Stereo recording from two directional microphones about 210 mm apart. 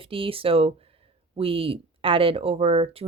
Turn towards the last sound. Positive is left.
turn(degrees=-25)  # may be behind; listen again after turning